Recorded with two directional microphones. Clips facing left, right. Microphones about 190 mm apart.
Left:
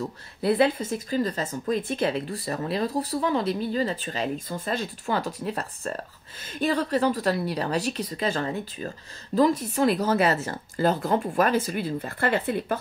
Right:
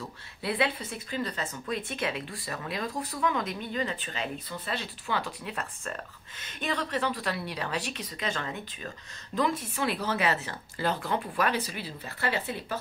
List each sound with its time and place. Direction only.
0.4 s speech: 40° left (ahead or behind)